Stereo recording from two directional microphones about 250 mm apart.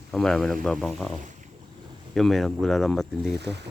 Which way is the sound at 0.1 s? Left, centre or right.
Centre.